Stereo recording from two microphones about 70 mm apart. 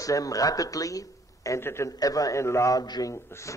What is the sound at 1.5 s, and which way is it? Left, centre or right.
Speech, left.